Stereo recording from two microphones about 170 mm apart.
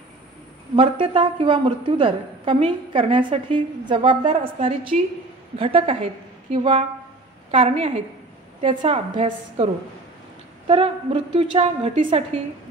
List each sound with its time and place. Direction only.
0.7 s a woman's voice: 30° right (ahead or behind)
10.7 s a woman's voice: 35° right (ahead or behind)